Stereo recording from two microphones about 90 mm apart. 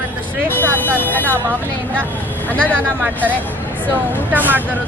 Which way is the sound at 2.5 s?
15° left (ahead or behind).